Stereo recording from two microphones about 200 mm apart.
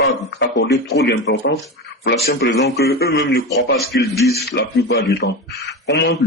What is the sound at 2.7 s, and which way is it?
Speech, 55° left (ahead or behind).